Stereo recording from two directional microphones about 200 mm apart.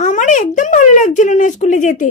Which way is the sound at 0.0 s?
35° left (ahead or behind).